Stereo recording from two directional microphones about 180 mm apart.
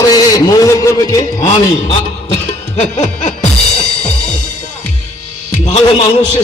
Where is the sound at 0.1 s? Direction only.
20° left (ahead or behind).